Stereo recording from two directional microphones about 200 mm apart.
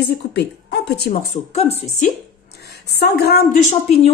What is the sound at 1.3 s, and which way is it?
Speech, 30° left (ahead or behind).